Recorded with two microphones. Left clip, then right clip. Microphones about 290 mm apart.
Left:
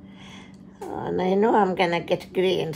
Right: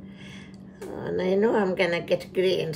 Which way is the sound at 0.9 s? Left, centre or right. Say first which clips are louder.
Left 2 dB; centre.